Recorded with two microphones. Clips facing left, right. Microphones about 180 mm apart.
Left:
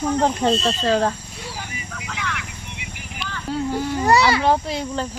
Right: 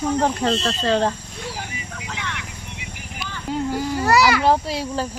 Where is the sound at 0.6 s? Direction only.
5° left (ahead or behind).